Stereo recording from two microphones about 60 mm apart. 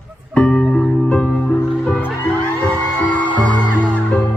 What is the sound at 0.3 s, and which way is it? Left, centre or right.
Music, centre.